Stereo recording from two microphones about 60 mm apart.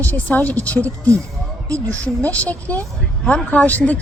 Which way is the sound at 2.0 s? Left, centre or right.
Left.